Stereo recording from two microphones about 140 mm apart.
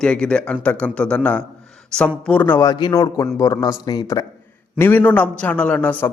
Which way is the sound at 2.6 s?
30° left (ahead or behind).